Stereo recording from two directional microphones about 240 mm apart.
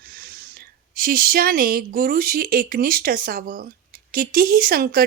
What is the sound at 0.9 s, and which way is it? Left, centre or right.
Speech, right.